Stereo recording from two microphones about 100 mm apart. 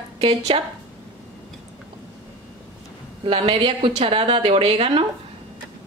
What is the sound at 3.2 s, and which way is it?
Speech, 65° right (ahead or behind).